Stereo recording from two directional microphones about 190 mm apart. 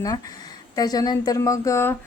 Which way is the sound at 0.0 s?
20° left (ahead or behind).